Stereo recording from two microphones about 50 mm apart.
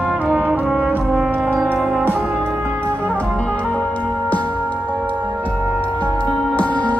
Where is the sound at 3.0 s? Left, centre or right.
Left.